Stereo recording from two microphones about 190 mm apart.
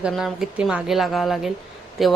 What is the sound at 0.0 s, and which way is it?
A woman's voice, centre (ahead or behind).